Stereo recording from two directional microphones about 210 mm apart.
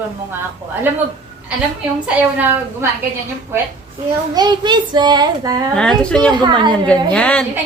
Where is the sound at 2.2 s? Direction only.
10° right (ahead or behind).